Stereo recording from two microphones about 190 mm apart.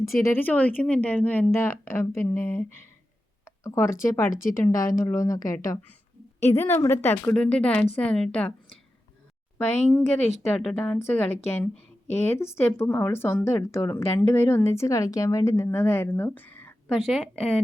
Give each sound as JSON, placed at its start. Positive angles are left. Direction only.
{"t": 0.0, "sound": "speech", "side_deg": 15}
{"t": 6.6, "sound": "speech", "side_deg": 10}
{"t": 16.9, "sound": "a woman's voice", "side_deg": 0}